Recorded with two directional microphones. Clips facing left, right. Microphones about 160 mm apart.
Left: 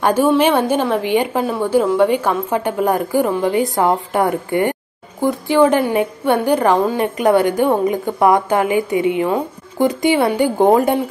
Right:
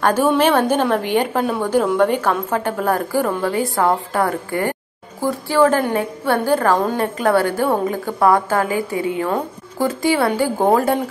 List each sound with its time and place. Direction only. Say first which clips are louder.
0.0 s a woman's voice: left 2 dB; 10° left (ahead or behind)